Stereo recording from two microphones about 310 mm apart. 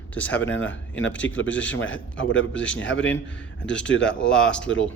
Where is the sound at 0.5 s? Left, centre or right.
Left.